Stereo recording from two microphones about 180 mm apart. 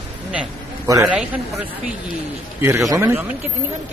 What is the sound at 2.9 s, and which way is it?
Speech, 15° right (ahead or behind).